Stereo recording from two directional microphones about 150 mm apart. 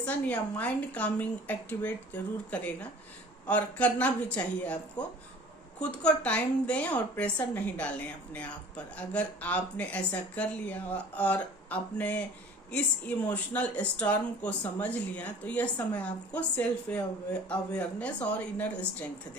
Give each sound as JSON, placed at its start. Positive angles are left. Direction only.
{"t": 0.0, "sound": "a woman's voice", "side_deg": 10}
{"t": 13.2, "sound": "a woman's voice", "side_deg": 10}